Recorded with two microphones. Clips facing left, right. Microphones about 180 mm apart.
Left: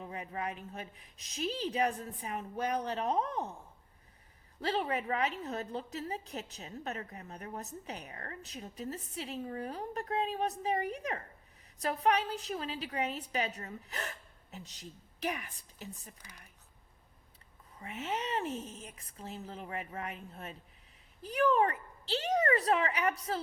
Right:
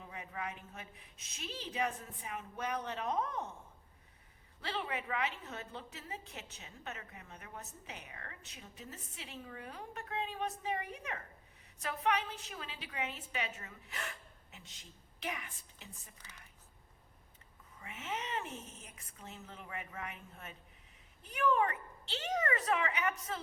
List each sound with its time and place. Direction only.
0.0 s a woman's voice: 35° left (ahead or behind)
4.6 s a woman's voice: 40° left (ahead or behind)
17.7 s a woman's voice: 35° left (ahead or behind)